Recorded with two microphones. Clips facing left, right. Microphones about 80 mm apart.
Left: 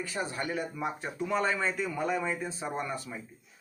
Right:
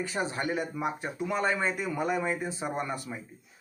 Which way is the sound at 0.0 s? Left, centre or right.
Right.